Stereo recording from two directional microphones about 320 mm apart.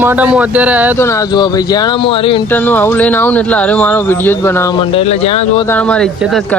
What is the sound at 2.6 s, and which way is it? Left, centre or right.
Speech, centre.